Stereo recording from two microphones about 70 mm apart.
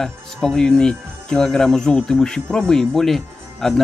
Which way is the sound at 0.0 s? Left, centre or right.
Centre.